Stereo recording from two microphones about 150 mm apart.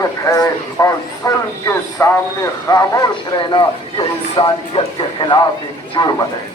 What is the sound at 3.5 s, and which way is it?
Speech, 35° left (ahead or behind).